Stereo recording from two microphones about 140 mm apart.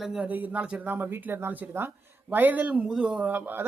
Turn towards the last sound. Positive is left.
turn(degrees=-10)  # may be behind; listen again after turning